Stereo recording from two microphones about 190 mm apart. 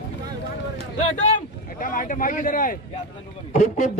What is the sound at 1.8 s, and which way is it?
A man's voice, 45° left (ahead or behind).